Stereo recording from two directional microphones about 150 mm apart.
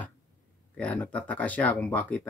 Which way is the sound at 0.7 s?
10° left (ahead or behind).